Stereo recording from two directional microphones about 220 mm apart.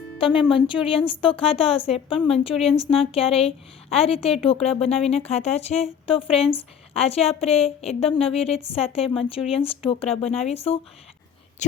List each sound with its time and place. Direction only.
0.2 s a woman's voice: 25° left (ahead or behind)